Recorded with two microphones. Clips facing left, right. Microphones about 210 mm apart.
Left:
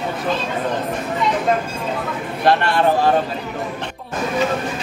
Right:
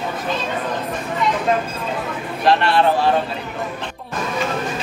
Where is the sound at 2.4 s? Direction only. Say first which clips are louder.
Even; 50° left (ahead or behind).